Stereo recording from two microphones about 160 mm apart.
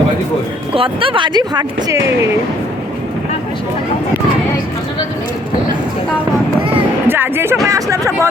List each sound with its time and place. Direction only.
0.7 s speech: 35° right (ahead or behind)
7.1 s speech: 15° right (ahead or behind)